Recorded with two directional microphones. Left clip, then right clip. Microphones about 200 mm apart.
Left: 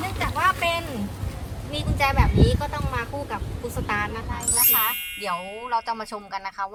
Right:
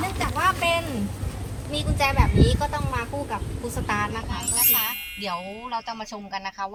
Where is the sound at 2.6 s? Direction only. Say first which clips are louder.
Right 1 dB; 5° left (ahead or behind).